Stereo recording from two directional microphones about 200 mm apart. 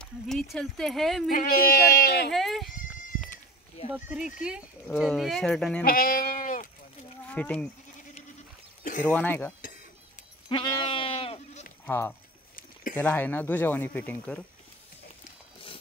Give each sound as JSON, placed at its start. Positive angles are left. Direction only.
{"t": 0.0, "sound": "speech", "side_deg": 0}
{"t": 1.3, "sound": "speech", "side_deg": 45}
{"t": 2.3, "sound": "speech", "side_deg": 0}
{"t": 3.9, "sound": "speech", "side_deg": -5}
{"t": 5.9, "sound": "goat", "side_deg": 45}
{"t": 7.2, "sound": "speech", "side_deg": 5}
{"t": 9.0, "sound": "speech", "side_deg": 10}
{"t": 10.5, "sound": "goat", "side_deg": 25}
{"t": 11.8, "sound": "speech", "side_deg": 15}